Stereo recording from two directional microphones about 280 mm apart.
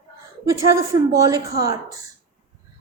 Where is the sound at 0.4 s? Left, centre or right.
Right.